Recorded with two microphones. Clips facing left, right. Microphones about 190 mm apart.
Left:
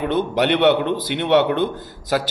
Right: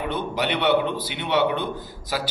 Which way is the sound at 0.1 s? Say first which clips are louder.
Left 9 dB; 50° left (ahead or behind).